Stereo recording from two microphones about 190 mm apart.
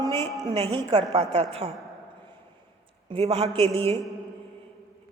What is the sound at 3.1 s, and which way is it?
Speech, 30° right (ahead or behind).